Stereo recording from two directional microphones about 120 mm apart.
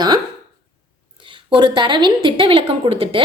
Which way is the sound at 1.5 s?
40° right (ahead or behind).